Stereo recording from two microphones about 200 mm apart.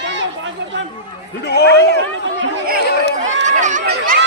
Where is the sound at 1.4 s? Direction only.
55° left (ahead or behind).